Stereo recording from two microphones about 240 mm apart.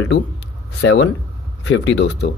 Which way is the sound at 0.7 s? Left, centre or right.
Left.